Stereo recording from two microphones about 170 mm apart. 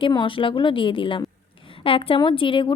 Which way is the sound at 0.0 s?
30° left (ahead or behind).